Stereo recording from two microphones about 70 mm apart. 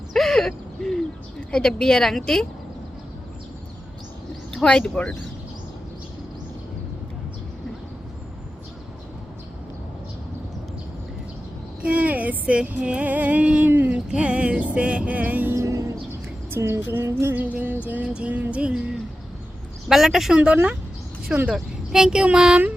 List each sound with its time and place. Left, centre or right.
0.1 s bird: centre
4.5 s speech: centre
11.8 s music: centre
13.7 s music: right
13.9 s music: centre
15.5 s a sound: right
16.5 s speech: right
16.9 s music: right
17.4 s music: right
19.9 s speech: centre
20.3 s music: centre